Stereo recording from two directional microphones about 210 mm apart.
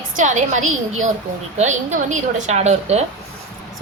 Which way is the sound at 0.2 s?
35° right (ahead or behind).